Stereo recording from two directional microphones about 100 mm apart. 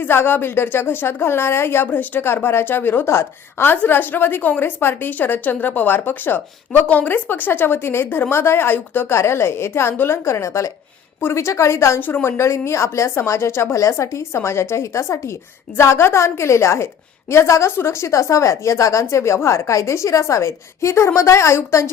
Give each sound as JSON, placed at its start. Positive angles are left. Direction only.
{"t": 0.0, "sound": "a woman's voice", "side_deg": 20}